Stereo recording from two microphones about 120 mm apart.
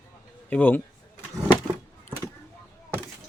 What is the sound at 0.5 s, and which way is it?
Speech, 15° left (ahead or behind).